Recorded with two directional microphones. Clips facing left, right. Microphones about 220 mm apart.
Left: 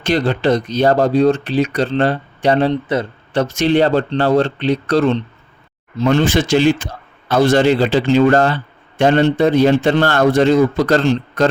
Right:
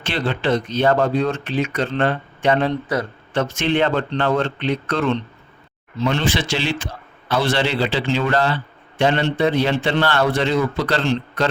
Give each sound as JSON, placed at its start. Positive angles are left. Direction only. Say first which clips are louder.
{"t": 0.0, "sound": "speech", "louder": "left 6 dB", "side_deg": 40}
{"t": 3.4, "sound": "a man's voice", "louder": "left 6 dB", "side_deg": 40}